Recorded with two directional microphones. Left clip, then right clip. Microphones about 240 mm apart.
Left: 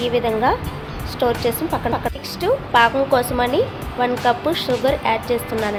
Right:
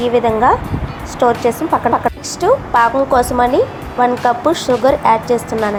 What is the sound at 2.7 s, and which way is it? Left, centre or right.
Speech, centre.